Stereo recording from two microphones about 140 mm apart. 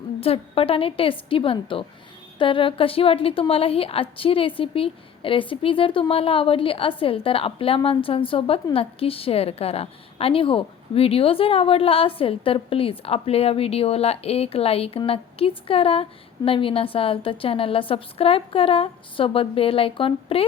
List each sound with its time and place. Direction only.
0.2 s a woman's voice: 45° left (ahead or behind)